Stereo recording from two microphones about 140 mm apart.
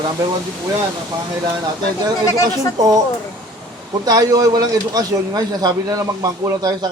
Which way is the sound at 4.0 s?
25° right (ahead or behind).